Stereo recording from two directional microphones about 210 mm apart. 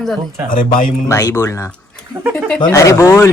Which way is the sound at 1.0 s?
15° left (ahead or behind).